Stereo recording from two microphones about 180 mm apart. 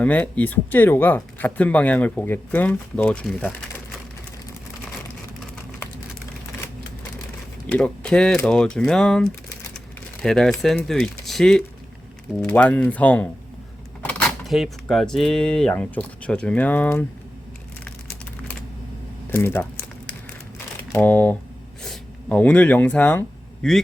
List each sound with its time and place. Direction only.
0.0 s speech: 10° left (ahead or behind)
7.7 s speech: 5° left (ahead or behind)
19.3 s crumpling: 15° left (ahead or behind)
20.9 s speech: 10° left (ahead or behind)